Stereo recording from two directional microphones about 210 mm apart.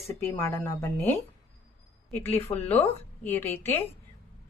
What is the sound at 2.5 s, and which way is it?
Speech, 20° left (ahead or behind).